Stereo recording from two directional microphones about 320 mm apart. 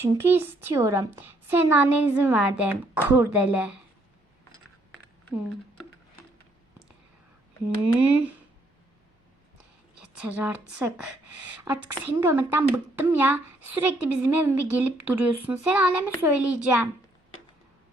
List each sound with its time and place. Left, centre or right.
0.0 s a woman's voice: centre
7.9 s a woman's voice: centre
10.2 s a woman's voice: centre
11.6 s a woman's voice: centre